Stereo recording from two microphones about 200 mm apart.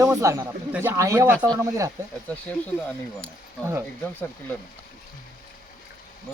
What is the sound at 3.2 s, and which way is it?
Speech, 15° right (ahead or behind).